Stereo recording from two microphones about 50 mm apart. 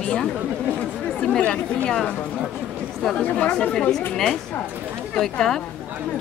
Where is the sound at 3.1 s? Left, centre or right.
Left.